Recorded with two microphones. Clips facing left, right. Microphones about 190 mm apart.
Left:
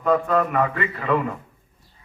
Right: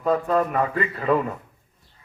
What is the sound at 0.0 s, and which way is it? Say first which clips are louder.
A man's voice: left 1 dB; 35° right (ahead or behind).